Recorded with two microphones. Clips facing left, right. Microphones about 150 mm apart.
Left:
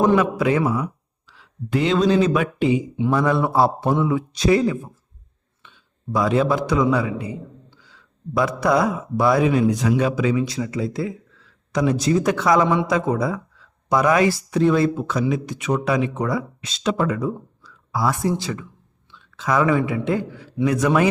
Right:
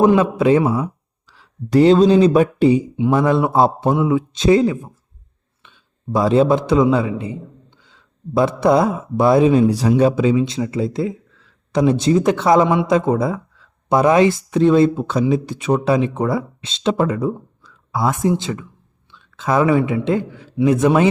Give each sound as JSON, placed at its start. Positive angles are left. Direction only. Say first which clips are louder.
{"t": 0.2, "sound": "speech", "louder": "right 5 dB", "side_deg": -25}
{"t": 1.3, "sound": "speech", "louder": "right 6 dB", "side_deg": -40}
{"t": 3.0, "sound": "a man's voice", "louder": "right 3 dB", "side_deg": -20}